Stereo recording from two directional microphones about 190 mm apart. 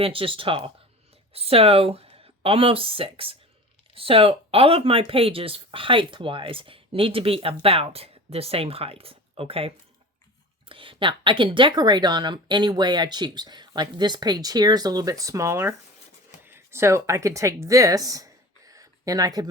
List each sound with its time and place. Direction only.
0.0 s a woman's voice: 30° right (ahead or behind)